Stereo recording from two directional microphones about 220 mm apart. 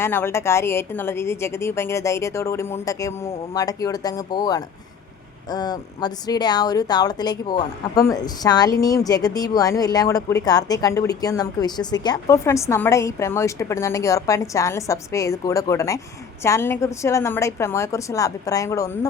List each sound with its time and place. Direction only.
0.0 s speech: 10° left (ahead or behind)